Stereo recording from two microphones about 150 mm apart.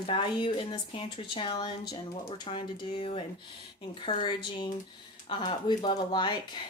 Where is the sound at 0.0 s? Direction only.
35° left (ahead or behind).